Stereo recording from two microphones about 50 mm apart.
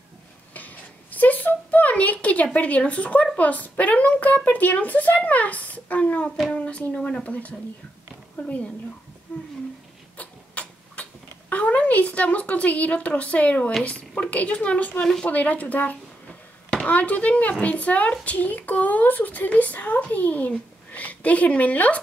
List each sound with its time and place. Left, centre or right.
0.6 s a sound: left
3.3 s a woman's voice: left
10.1 s tick-tock: left
13.8 s a woman's voice: left